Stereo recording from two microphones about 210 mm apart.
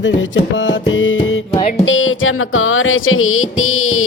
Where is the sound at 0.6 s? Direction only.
65° left (ahead or behind).